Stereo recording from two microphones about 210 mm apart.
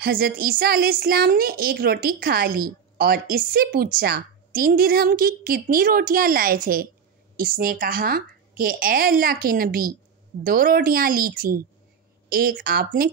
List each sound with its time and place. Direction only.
0.0 s a woman's voice: 45° right (ahead or behind)